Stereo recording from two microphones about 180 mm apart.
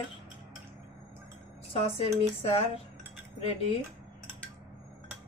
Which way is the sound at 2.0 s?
35° left (ahead or behind).